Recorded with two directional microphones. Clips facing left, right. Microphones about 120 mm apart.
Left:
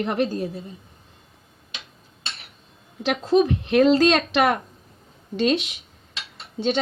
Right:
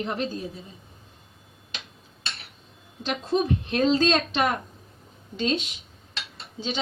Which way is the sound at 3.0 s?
85° left.